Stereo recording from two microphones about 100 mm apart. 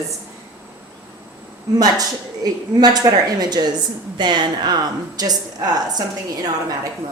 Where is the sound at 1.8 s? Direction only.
40° right (ahead or behind).